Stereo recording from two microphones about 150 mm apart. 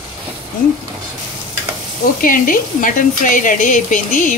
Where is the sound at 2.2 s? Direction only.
65° left (ahead or behind).